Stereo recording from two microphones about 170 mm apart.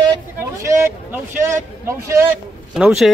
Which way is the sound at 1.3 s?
45° right (ahead or behind).